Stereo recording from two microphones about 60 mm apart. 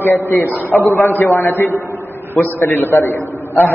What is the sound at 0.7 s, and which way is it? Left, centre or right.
Speech, left.